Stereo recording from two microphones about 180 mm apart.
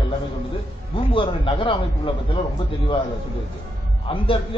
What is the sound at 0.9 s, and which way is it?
Speech, 30° left (ahead or behind).